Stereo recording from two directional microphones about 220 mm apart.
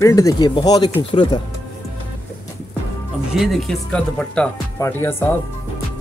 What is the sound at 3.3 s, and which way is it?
Speech, centre (ahead or behind).